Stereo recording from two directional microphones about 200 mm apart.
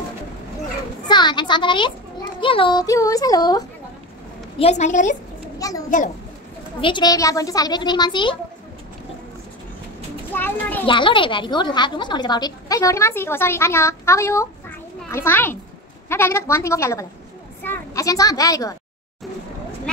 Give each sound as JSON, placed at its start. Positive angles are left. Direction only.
{"t": 1.0, "sound": "a woman's voice", "side_deg": 20}
{"t": 4.6, "sound": "a woman's voice", "side_deg": 35}
{"t": 5.6, "sound": "a child's voice", "side_deg": 15}
{"t": 10.3, "sound": "a woman's voice", "side_deg": 10}
{"t": 10.9, "sound": "a woman's voice", "side_deg": 25}